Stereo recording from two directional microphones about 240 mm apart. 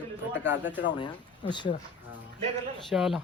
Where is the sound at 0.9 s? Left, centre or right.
Centre.